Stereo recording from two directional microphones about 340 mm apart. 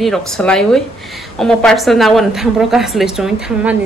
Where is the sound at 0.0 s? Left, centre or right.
Centre.